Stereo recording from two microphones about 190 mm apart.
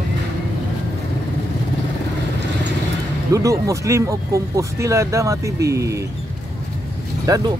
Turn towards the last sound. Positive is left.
turn(degrees=-20)  # may be behind; listen again after turning